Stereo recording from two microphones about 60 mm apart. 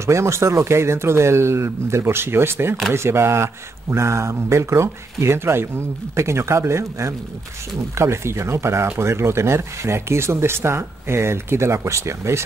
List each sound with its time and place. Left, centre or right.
0.0 s speech: right